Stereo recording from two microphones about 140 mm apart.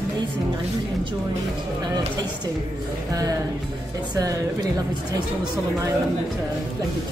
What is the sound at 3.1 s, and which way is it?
Speech, 25° right (ahead or behind).